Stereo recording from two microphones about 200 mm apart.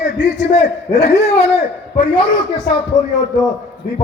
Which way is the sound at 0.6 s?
60° left (ahead or behind).